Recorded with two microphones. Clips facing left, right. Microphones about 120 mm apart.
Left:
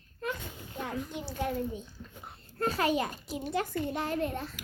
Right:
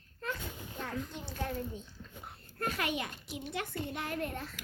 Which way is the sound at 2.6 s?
35° left (ahead or behind).